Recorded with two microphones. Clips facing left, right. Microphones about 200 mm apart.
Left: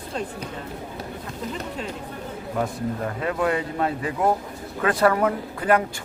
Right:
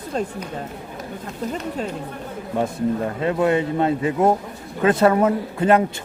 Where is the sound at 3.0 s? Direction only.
25° right (ahead or behind).